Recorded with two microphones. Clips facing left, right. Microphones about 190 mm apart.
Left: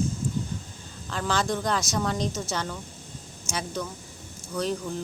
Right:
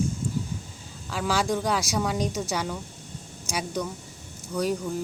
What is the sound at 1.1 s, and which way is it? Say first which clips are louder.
A woman's voice: right 1 dB; 10° right (ahead or behind).